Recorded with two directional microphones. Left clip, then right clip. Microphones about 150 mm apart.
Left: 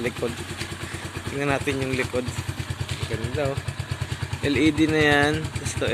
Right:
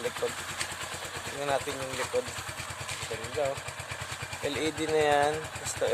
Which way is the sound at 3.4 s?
5° right (ahead or behind).